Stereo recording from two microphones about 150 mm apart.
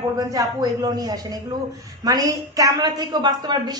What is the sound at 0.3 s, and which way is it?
A man's voice, 25° right (ahead or behind).